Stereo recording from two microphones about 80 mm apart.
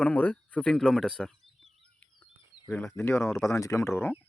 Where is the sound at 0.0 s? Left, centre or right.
Centre.